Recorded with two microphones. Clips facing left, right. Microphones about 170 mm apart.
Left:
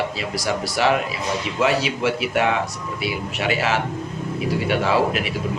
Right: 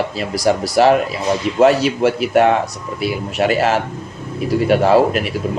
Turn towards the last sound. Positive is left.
turn(degrees=-45)  # may be behind; listen again after turning